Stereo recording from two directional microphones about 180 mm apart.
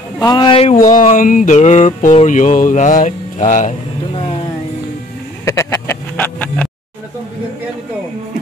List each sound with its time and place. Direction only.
0.2 s speech: 25° left (ahead or behind)
0.7 s a sound: 45° left (ahead or behind)
5.4 s vehicle: 15° left (ahead or behind)